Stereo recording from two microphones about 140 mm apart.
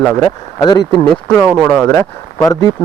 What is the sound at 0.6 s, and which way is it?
Speech, 30° left (ahead or behind).